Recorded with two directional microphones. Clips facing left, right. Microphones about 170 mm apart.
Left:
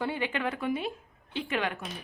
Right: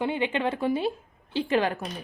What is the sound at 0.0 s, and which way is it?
A woman's voice, 20° right (ahead or behind).